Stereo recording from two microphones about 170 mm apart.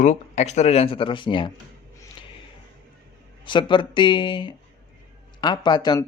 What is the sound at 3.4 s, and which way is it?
Speech, 30° left (ahead or behind).